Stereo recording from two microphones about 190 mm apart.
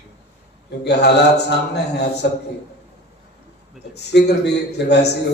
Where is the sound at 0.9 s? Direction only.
60° left (ahead or behind).